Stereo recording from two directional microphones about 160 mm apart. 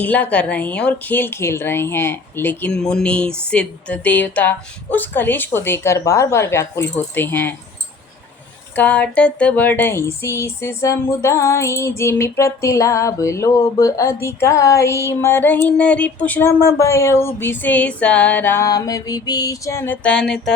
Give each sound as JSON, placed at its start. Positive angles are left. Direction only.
{"t": 0.0, "sound": "speech", "side_deg": 10}
{"t": 8.7, "sound": "speech", "side_deg": 10}